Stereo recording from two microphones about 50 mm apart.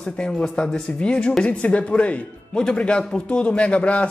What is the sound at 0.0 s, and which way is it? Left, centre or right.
A man's voice, centre.